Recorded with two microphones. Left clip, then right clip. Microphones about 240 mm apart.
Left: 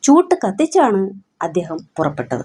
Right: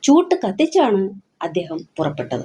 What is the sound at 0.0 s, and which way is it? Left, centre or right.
Speech, left.